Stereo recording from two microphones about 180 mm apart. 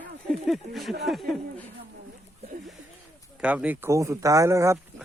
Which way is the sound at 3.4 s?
5° right (ahead or behind).